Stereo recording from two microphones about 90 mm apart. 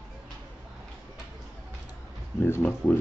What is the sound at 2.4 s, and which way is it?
Speech, 25° left (ahead or behind).